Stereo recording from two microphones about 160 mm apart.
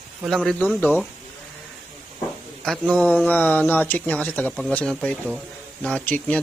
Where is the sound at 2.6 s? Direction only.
5° left (ahead or behind).